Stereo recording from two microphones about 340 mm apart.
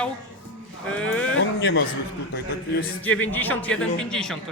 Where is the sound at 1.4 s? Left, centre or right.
Left.